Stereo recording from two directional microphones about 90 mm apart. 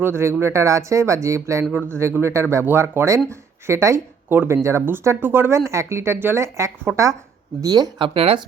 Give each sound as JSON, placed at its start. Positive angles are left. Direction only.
{"t": 0.0, "sound": "speech", "side_deg": -30}
{"t": 6.9, "sound": "speech", "side_deg": -15}
{"t": 7.6, "sound": "speech", "side_deg": -45}
{"t": 8.0, "sound": "speech", "side_deg": -90}